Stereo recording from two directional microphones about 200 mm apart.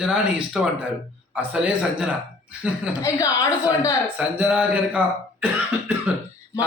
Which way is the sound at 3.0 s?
15° left (ahead or behind).